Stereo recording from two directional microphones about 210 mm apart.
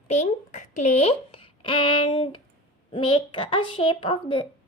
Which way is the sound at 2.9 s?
25° left (ahead or behind).